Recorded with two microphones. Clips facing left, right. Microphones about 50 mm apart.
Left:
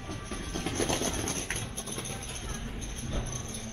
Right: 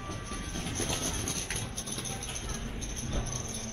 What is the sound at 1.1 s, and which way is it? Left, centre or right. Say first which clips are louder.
Clip-clop: left 3 dB; left.